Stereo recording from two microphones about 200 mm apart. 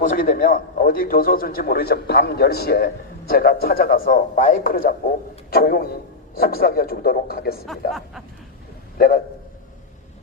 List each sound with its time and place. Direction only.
0.0 s a man's voice: 45° left (ahead or behind)
9.0 s a man's voice: 50° left (ahead or behind)